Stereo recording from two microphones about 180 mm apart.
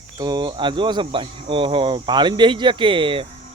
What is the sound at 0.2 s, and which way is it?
Speech, 25° right (ahead or behind).